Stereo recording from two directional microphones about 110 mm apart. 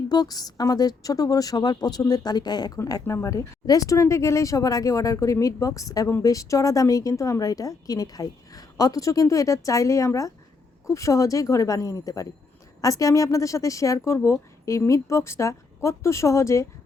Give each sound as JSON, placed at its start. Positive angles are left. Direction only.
{"t": 0.1, "sound": "a woman's voice", "side_deg": 35}